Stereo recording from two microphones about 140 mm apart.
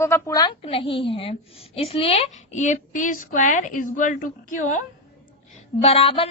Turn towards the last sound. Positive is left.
turn(degrees=40)  # may be behind; listen again after turning